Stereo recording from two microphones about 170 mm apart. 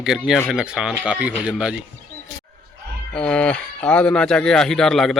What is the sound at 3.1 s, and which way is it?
Speech, 5° left (ahead or behind).